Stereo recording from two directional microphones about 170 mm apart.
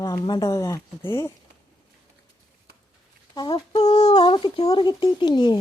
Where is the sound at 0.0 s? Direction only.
25° left (ahead or behind).